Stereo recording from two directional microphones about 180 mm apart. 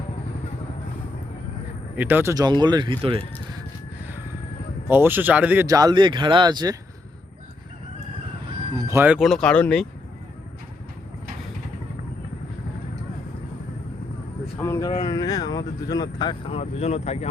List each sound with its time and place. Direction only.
2.0 s speech: 10° right (ahead or behind); by 3.2 s 30° right (ahead or behind)
4.9 s speech: 10° right (ahead or behind)
5.6 s speech: 20° right (ahead or behind)
8.8 s speech: 15° right (ahead or behind)
9.1 s speech: centre (ahead or behind)
14.6 s speech: 15° left (ahead or behind); by 17.2 s 35° left (ahead or behind)